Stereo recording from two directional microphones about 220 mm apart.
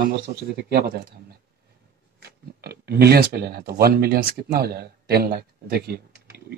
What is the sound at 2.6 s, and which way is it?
Speech, 45° right (ahead or behind).